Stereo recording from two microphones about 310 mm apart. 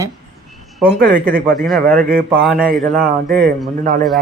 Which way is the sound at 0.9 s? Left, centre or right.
Right.